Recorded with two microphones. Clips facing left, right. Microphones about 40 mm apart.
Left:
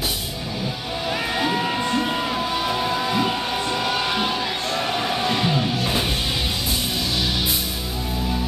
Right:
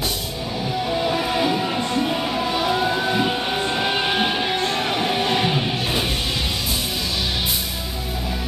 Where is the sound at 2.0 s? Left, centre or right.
Centre.